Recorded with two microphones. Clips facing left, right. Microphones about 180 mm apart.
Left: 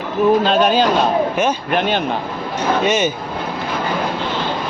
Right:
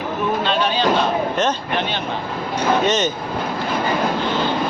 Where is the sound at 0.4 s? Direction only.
45° left (ahead or behind).